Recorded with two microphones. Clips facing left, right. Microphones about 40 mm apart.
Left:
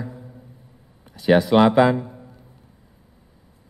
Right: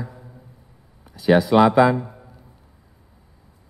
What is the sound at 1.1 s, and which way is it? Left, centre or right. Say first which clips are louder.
Speech: even; centre.